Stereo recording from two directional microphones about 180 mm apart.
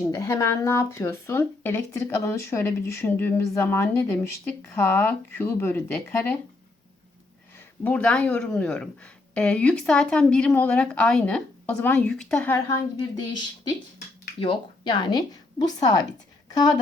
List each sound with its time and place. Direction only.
0.0 s speech: 15° left (ahead or behind)
7.9 s speech: 5° left (ahead or behind)
14.4 s speech: 25° left (ahead or behind)